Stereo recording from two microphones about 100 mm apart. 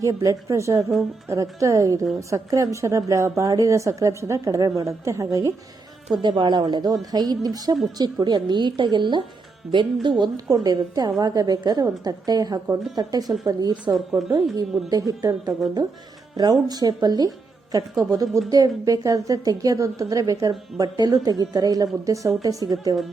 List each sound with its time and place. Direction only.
0.2 s a woman's voice: 35° right (ahead or behind)
6.2 s a woman's voice: 50° right (ahead or behind)